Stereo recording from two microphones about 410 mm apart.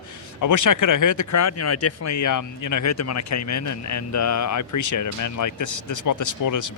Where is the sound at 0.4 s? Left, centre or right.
Left.